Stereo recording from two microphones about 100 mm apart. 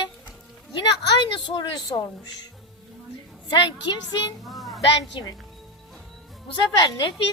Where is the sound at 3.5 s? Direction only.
45° left (ahead or behind).